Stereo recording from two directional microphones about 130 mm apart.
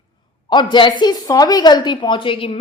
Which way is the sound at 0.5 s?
35° left (ahead or behind).